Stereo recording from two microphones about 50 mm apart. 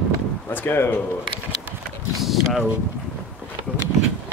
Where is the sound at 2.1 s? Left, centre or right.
Centre.